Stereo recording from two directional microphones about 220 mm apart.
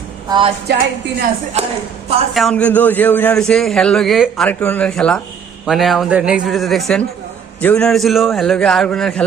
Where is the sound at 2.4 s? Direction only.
5° left (ahead or behind).